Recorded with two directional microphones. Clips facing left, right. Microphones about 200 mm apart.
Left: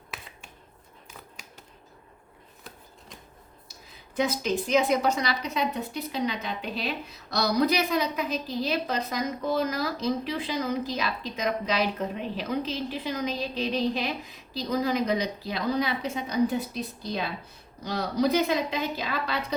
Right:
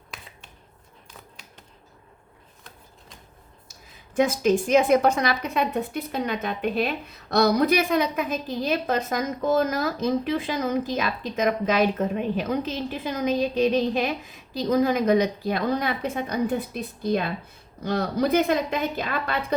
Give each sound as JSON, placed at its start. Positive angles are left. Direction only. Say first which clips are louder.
{"t": 4.1, "sound": "a woman's voice", "louder": "right 6 dB", "side_deg": -50}